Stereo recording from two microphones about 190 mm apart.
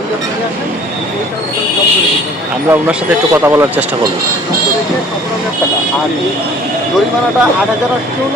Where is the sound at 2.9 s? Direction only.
10° right (ahead or behind).